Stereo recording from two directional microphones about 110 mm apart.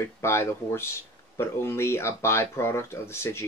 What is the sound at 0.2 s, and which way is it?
Speech, 25° left (ahead or behind).